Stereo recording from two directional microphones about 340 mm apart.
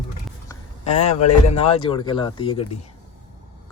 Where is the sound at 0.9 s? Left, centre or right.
Left.